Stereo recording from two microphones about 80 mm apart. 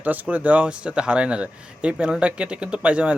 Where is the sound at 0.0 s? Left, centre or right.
Right.